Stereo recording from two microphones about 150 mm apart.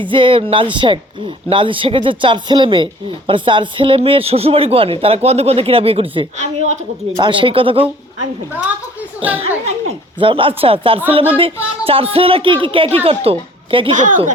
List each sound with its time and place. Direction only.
0.0 s speech: 35° right (ahead or behind); by 7.2 s 50° right (ahead or behind)
7.2 s speech: 35° right (ahead or behind)
9.2 s a woman's voice: 40° right (ahead or behind)
13.9 s speech: 60° right (ahead or behind)